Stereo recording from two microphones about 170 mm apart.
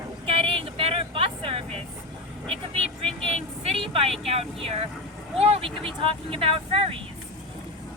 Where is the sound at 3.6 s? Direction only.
35° right (ahead or behind).